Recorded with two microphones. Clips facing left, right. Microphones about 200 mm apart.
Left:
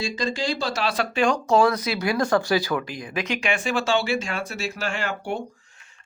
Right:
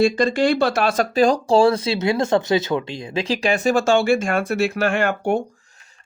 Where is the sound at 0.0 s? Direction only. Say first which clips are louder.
Right 10 dB; 60° right (ahead or behind).